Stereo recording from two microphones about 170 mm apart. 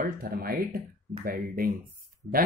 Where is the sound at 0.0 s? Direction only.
60° right (ahead or behind).